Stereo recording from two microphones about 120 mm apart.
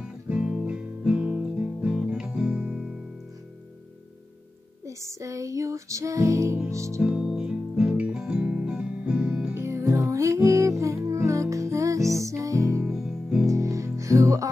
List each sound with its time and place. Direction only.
0.3 s guitar: 5° right (ahead or behind)
4.8 s music: 25° right (ahead or behind)
7.0 s music: 10° right (ahead or behind)
9.5 s music: 25° right (ahead or behind)
12.8 s music: 5° right (ahead or behind)
13.5 s music: 25° right (ahead or behind)